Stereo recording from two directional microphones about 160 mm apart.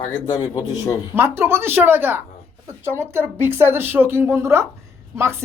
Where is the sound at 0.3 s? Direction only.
20° left (ahead or behind).